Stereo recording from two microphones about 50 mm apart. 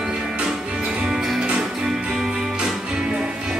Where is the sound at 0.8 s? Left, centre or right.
Right.